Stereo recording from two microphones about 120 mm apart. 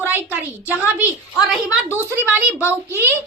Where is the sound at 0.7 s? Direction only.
15° right (ahead or behind).